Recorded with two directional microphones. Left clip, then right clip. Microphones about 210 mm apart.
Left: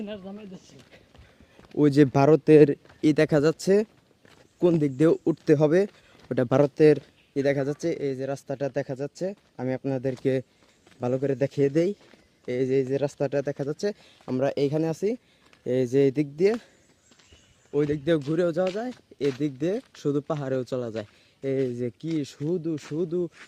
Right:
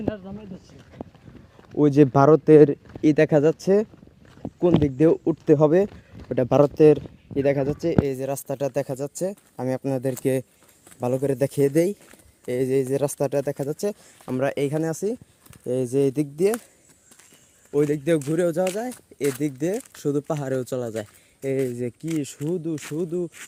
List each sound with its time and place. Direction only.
2.0 s speech: 10° left (ahead or behind)
5.5 s speech: 5° left (ahead or behind)
8.1 s speech: 10° right (ahead or behind)
17.7 s speech: 10° right (ahead or behind)
22.7 s speech: 50° right (ahead or behind)
23.0 s speech: centre (ahead or behind)